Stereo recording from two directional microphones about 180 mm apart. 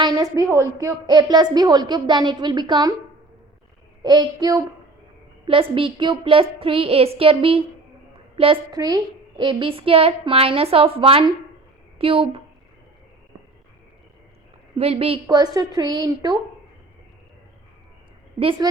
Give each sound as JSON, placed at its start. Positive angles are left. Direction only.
{"t": 0.0, "sound": "a woman's voice", "side_deg": -20}
{"t": 4.0, "sound": "a woman's voice", "side_deg": -20}
{"t": 8.7, "sound": "a woman's voice", "side_deg": -20}
{"t": 14.8, "sound": "a woman's voice", "side_deg": -35}
{"t": 18.3, "sound": "a woman's voice", "side_deg": -30}